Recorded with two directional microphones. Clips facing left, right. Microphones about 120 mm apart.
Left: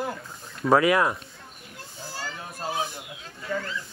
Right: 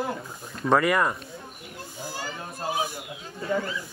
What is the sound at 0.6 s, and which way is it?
Speech, centre (ahead or behind).